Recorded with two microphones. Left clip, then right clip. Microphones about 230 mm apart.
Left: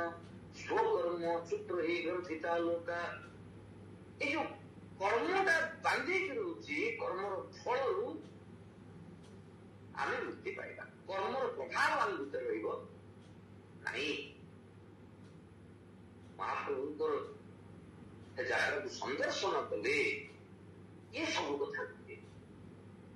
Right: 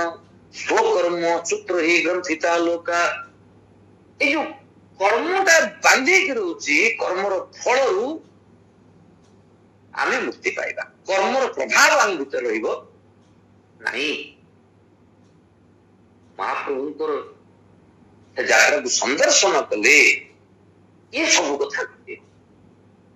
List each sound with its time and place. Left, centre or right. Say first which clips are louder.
0.0 s a man's voice: right 15 dB; right
4.2 s a man's voice: right 16 dB; right
9.9 s a man's voice: right 16 dB; right
13.8 s a man's voice: right 15 dB; right
16.3 s a man's voice: right 14 dB; right
18.3 s a man's voice: right 19 dB; right
21.1 s a man's voice: right 18 dB; right